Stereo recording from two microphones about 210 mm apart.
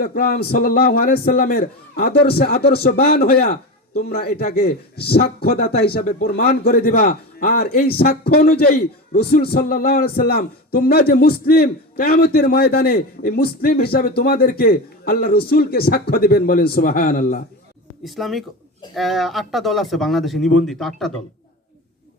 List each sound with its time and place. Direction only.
0.0 s a man's voice: 45° left (ahead or behind)
18.0 s speech: centre (ahead or behind)